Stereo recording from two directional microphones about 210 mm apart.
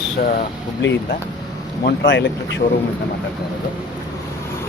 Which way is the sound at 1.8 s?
55° left (ahead or behind).